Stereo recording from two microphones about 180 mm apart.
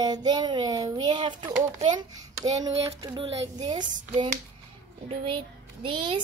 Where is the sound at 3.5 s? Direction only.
25° right (ahead or behind).